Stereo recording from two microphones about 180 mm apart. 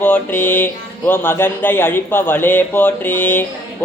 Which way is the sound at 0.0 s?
10° left (ahead or behind).